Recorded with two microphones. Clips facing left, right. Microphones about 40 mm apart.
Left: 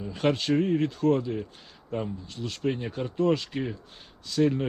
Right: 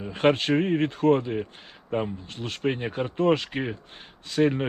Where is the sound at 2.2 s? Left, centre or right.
Right.